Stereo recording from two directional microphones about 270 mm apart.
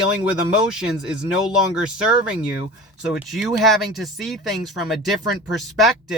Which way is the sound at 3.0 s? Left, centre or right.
Centre.